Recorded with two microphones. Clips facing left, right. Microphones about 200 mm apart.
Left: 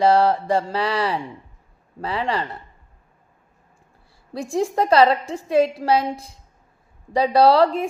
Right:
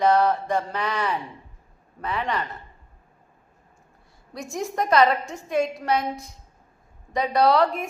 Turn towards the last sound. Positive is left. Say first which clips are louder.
# left 4 dB
turn(degrees=30)  # may be behind; listen again after turning